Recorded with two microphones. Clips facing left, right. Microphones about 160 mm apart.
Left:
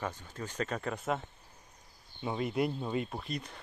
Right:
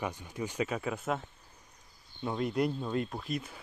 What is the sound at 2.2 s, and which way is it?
Speech, 5° left (ahead or behind).